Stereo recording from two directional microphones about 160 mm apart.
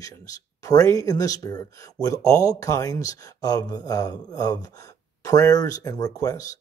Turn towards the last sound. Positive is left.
turn(degrees=25)  # may be behind; listen again after turning